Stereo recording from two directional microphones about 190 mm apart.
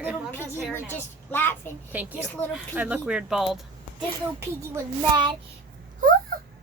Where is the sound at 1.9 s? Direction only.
10° right (ahead or behind).